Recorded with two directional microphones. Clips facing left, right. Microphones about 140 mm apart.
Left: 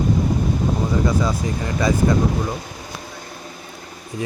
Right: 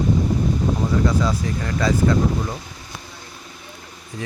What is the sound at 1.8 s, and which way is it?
Speech, 15° left (ahead or behind).